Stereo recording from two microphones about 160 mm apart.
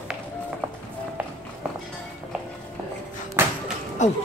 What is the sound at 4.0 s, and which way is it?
Speech, 50° left (ahead or behind).